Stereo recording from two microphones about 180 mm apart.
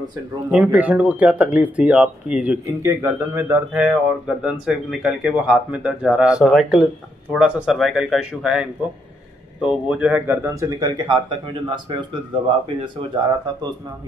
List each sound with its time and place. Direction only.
0.5 s speech: 5° right (ahead or behind); by 13.2 s 25° right (ahead or behind)